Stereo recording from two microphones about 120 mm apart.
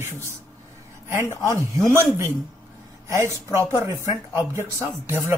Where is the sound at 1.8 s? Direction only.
25° right (ahead or behind).